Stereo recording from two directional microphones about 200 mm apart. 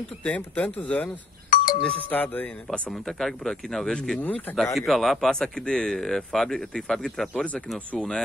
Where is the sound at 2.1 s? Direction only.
10° left (ahead or behind).